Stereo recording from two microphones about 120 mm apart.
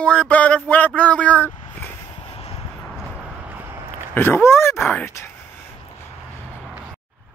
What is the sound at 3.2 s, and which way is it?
Vehicle, 10° right (ahead or behind).